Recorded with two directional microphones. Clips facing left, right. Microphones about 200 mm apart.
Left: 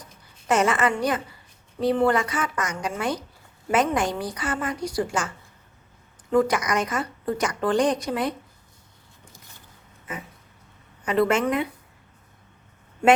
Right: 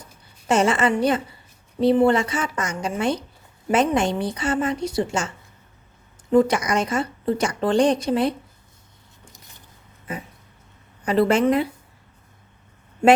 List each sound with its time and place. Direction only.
0.4 s a woman's voice: 30° right (ahead or behind)
6.3 s a woman's voice: 30° right (ahead or behind)
11.0 s a woman's voice: 35° right (ahead or behind)